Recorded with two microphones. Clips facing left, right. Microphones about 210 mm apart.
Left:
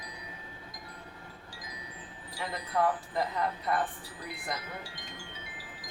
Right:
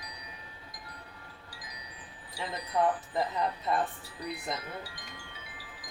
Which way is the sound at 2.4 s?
20° right (ahead or behind).